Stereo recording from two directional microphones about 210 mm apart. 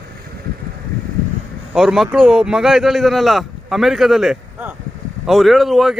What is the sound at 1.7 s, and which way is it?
Speech, centre (ahead or behind).